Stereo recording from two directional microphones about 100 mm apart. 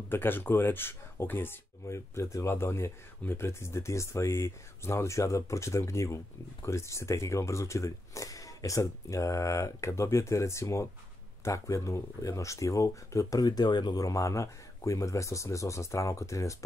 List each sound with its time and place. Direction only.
0.1 s speech: 20° left (ahead or behind)